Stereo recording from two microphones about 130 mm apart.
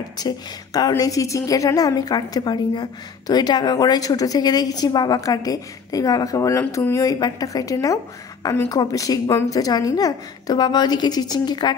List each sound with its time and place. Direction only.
0.7 s a woman's voice: 30° left (ahead or behind)